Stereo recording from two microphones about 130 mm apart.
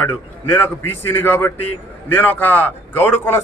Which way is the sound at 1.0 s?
15° left (ahead or behind).